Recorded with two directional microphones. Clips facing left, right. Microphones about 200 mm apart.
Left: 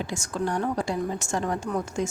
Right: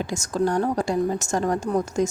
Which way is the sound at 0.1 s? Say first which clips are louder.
Right 5 dB; 40° right (ahead or behind).